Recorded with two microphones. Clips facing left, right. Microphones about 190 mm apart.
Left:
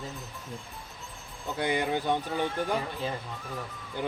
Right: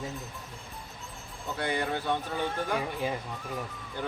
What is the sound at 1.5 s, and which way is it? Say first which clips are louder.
Speech: left 3 dB; 15° left (ahead or behind).